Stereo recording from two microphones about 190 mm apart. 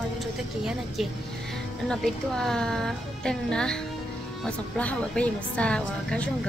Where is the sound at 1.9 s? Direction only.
5° left (ahead or behind).